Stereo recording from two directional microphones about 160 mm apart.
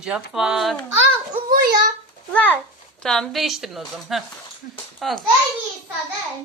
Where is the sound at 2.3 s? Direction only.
10° left (ahead or behind).